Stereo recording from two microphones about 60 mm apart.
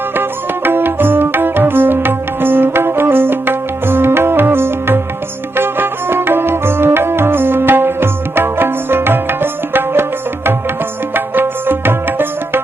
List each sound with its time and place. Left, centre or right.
0.2 s music: right